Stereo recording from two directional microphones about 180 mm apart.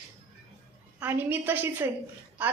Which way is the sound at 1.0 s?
10° right (ahead or behind).